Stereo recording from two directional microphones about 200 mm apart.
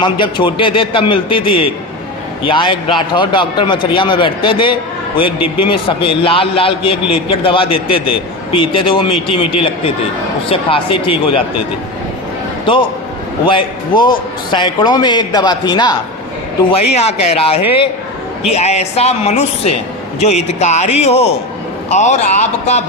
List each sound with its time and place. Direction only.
0.0 s a man's voice: 25° left (ahead or behind)
13.5 s a man's voice: 25° left (ahead or behind)
16.7 s a man's voice: 30° left (ahead or behind)